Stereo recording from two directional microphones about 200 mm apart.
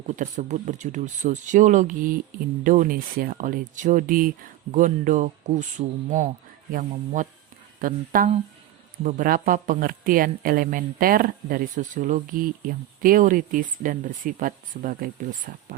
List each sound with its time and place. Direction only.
0.1 s speech: 35° right (ahead or behind)